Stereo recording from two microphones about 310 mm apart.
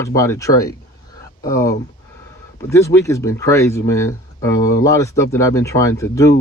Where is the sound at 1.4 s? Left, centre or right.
Left.